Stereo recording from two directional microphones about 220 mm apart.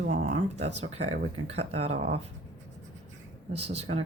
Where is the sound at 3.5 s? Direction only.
30° right (ahead or behind).